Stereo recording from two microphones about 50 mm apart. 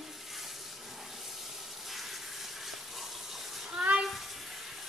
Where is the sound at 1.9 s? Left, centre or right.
Centre.